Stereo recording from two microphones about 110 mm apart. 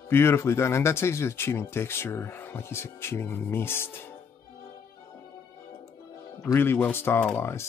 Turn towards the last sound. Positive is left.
turn(degrees=25)  # may be behind; listen again after turning